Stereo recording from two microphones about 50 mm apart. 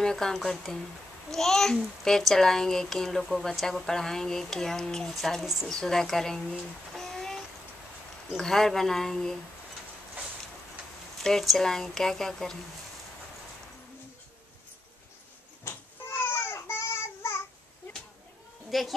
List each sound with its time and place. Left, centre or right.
0.0 s a child's voice: centre
5.1 s speech: centre
5.7 s a child's voice: centre
7.0 s a sound: centre
8.4 s a child's voice: centre
11.1 s a child's voice: centre
15.7 s cat: left
16.3 s babbling: left
18.7 s speech: centre